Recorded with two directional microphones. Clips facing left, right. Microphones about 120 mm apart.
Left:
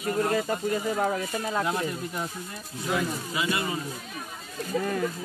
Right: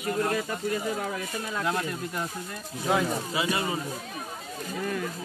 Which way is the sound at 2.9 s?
90° right.